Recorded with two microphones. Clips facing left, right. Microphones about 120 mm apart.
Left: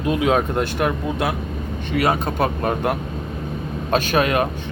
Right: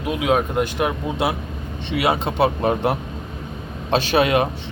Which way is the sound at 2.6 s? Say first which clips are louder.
Right 2 dB; 25° right (ahead or behind).